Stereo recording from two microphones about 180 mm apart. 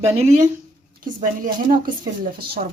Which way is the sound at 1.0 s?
50° right (ahead or behind).